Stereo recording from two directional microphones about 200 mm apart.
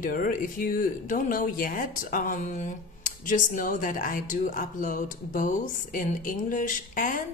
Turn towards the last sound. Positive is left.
turn(degrees=40)  # may be behind; listen again after turning